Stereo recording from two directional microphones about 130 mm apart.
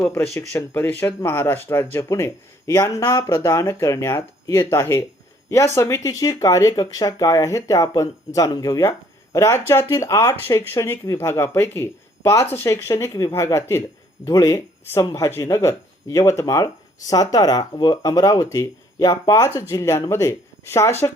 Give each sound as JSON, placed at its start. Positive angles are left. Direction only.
{"t": 0.0, "sound": "speech", "side_deg": 15}